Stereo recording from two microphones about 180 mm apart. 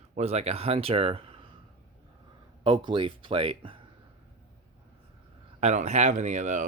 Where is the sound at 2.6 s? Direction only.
25° right (ahead or behind).